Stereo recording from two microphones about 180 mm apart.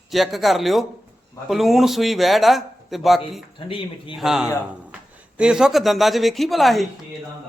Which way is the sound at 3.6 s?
30° left (ahead or behind).